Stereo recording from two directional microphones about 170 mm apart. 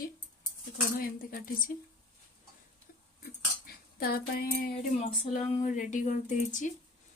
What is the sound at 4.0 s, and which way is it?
Speech, 65° left (ahead or behind).